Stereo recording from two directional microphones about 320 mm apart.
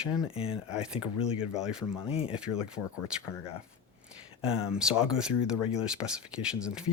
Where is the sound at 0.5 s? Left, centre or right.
Centre.